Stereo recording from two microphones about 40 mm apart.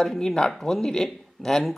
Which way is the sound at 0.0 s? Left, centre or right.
Centre.